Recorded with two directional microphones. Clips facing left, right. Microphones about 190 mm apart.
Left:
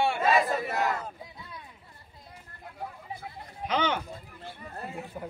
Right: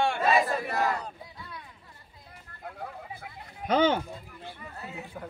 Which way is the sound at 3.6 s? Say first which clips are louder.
Right 5 dB; 40° right (ahead or behind).